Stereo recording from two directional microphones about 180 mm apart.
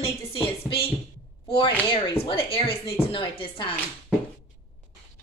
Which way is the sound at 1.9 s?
30° left (ahead or behind).